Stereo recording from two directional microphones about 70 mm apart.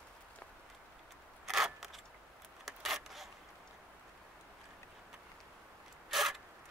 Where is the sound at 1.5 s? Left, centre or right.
Centre.